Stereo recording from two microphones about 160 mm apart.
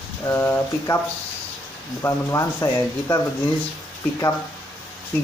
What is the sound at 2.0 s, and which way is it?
Speech, 20° left (ahead or behind).